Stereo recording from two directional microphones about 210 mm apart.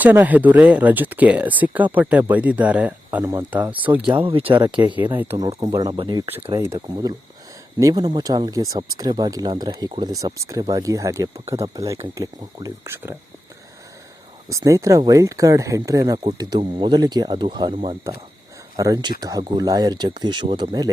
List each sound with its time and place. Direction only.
0.0 s speech: 10° right (ahead or behind)
4.1 s speech: 25° right (ahead or behind)
4.9 s speech: 10° right (ahead or behind)
5.5 s speech: 20° right (ahead or behind)
14.5 s speech: 15° right (ahead or behind)